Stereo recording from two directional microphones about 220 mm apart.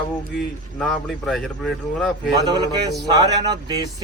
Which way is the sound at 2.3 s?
20° right (ahead or behind).